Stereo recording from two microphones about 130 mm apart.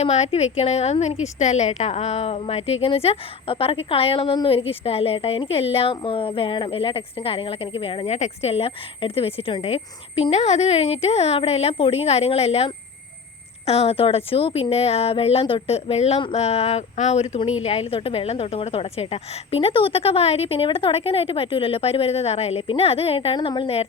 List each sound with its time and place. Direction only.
0.0 s speech: 55° left (ahead or behind)